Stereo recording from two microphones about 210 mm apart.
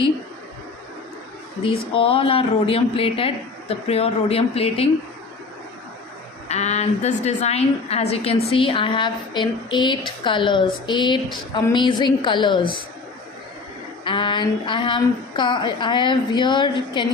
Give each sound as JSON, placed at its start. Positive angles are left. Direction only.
{"t": 1.6, "sound": "a woman's voice", "side_deg": 25}
{"t": 6.5, "sound": "a woman's voice", "side_deg": 30}
{"t": 14.0, "sound": "a woman's voice", "side_deg": 25}